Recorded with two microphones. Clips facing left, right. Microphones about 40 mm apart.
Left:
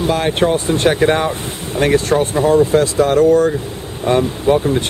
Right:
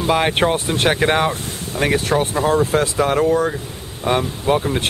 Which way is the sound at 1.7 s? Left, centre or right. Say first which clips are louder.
Left 4 dB; left.